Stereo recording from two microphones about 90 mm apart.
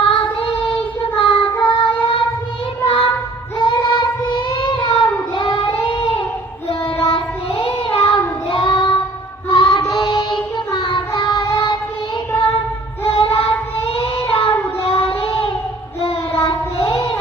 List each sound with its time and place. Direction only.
0.0 s child singing: 80° left
2.8 s child singing: 90° left
3.7 s child singing: 55° left (ahead or behind)
7.0 s child singing: 60° left (ahead or behind)
9.5 s music: 60° left (ahead or behind)
9.8 s child singing: 55° left (ahead or behind)
13.1 s child singing: 90° left
16.4 s child singing: 65° left (ahead or behind)